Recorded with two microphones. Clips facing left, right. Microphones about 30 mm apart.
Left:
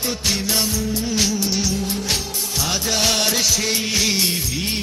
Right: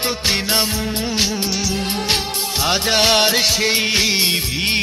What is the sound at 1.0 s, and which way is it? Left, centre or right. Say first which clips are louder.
Music: right 1 dB; right.